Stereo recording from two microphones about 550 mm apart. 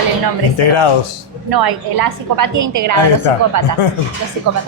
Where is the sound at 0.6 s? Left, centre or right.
Left.